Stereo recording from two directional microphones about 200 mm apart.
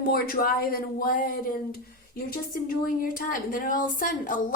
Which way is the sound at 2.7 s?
45° left (ahead or behind).